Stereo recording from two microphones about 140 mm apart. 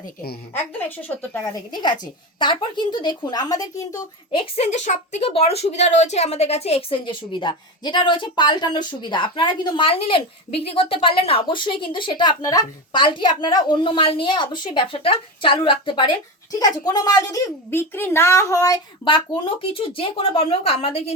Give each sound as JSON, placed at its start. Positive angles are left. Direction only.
{"t": 0.5, "sound": "speech", "side_deg": 15}
{"t": 1.7, "sound": "speech", "side_deg": 30}
{"t": 4.4, "sound": "speech", "side_deg": 45}